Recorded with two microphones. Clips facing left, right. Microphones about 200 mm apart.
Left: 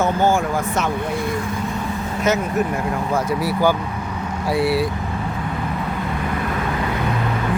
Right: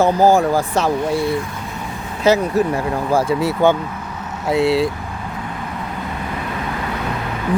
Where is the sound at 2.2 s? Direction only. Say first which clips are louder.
Right 5 dB; 30° right (ahead or behind).